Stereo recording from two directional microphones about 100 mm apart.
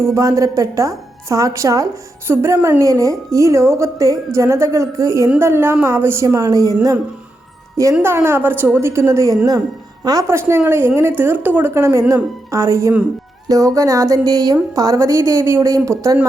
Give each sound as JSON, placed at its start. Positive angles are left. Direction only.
{"t": 0.0, "sound": "a woman's voice", "side_deg": -30}
{"t": 8.0, "sound": "speech", "side_deg": -25}
{"t": 10.2, "sound": "a woman's voice", "side_deg": -25}